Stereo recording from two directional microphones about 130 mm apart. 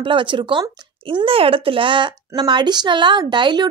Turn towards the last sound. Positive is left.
turn(degrees=-35)  # may be behind; listen again after turning